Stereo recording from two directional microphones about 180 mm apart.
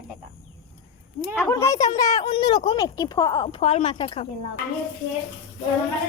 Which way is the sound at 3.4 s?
35° left (ahead or behind).